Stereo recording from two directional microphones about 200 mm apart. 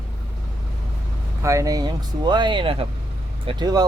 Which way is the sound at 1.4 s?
15° right (ahead or behind).